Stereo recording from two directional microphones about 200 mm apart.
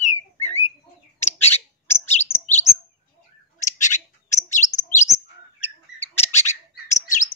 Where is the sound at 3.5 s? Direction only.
40° left (ahead or behind).